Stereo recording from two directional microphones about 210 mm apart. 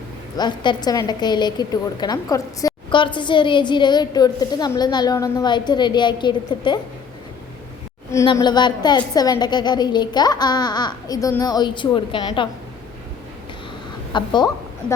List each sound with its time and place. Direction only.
0.3 s a woman's voice: 20° left (ahead or behind)
8.1 s a woman's voice: 15° left (ahead or behind)
14.1 s a woman's voice: 20° left (ahead or behind)